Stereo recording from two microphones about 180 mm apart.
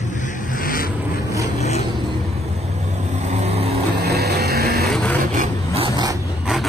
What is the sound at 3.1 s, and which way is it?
Vehicle, 40° right (ahead or behind).